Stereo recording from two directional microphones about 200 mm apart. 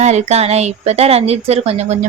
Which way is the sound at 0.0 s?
35° right (ahead or behind).